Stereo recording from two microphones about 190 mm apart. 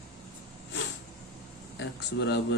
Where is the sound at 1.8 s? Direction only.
65° left (ahead or behind).